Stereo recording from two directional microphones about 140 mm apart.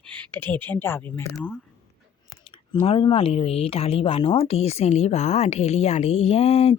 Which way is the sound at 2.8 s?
40° left (ahead or behind).